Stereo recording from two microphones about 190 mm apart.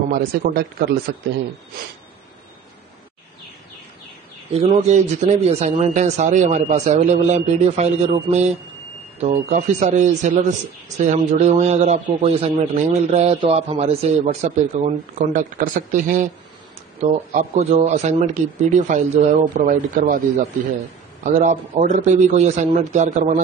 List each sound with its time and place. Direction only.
0.1 s speech: 50° right (ahead or behind)
4.6 s a man's voice: 35° right (ahead or behind)